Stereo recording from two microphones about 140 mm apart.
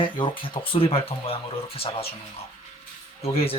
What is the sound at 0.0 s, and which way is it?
Speech, 40° left (ahead or behind).